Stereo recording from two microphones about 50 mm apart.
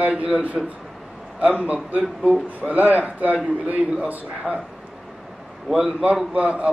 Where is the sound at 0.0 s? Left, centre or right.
Right.